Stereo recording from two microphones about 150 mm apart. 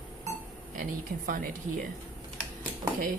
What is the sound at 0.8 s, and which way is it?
Speech, 65° right (ahead or behind).